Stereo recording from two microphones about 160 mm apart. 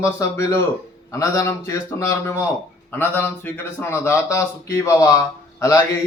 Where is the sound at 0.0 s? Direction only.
20° left (ahead or behind).